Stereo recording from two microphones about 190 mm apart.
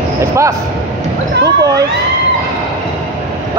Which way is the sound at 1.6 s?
20° right (ahead or behind).